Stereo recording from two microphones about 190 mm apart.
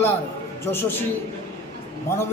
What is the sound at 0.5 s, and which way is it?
Speech, 10° left (ahead or behind).